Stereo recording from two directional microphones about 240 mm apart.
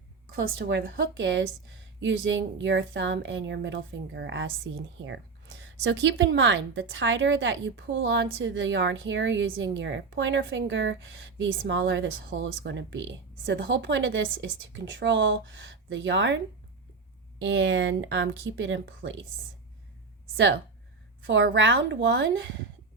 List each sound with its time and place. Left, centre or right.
0.3 s speech: right
17.4 s speech: right
20.3 s speech: right